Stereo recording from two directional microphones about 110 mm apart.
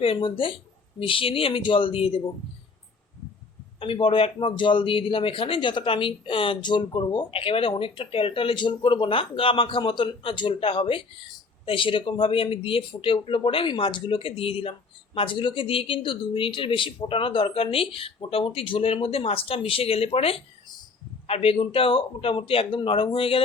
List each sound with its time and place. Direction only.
0.0 s speech: 50° left (ahead or behind)
3.8 s speech: 55° left (ahead or behind)